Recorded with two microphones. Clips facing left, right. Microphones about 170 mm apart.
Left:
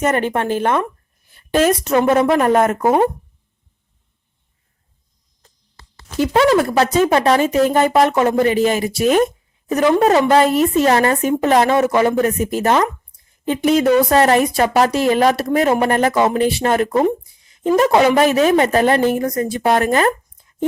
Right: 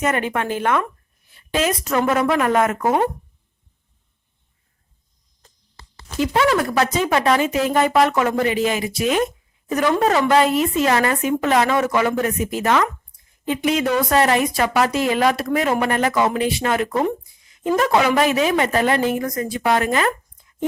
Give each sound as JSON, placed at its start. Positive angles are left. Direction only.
{"t": 0.0, "sound": "speech", "side_deg": 35}
{"t": 1.9, "sound": "speech", "side_deg": 25}
{"t": 6.2, "sound": "speech", "side_deg": 35}
{"t": 8.1, "sound": "speech", "side_deg": 30}
{"t": 9.7, "sound": "speech", "side_deg": 25}
{"t": 16.9, "sound": "a woman's voice", "side_deg": 20}